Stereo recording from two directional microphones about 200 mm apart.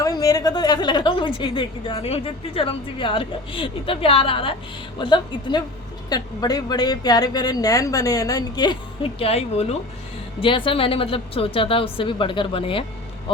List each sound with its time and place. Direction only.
0.0 s a woman's voice: 20° left (ahead or behind)